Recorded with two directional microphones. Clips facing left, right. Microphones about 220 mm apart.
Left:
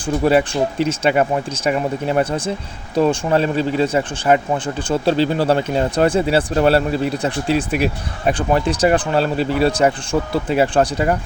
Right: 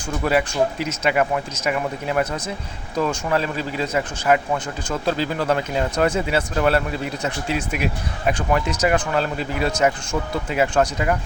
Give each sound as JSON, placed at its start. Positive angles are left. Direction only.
{"t": 0.0, "sound": "speech", "side_deg": 30}